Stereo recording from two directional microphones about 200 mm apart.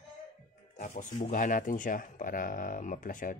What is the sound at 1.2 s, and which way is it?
Speech, 40° left (ahead or behind).